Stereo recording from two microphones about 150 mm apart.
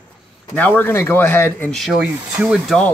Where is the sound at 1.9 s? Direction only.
5° right (ahead or behind).